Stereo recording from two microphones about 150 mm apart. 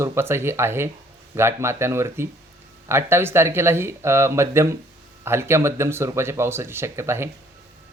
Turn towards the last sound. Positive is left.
turn(degrees=-15)  # may be behind; listen again after turning